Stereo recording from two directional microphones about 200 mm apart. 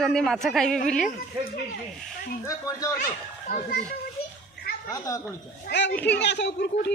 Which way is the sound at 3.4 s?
40° left (ahead or behind).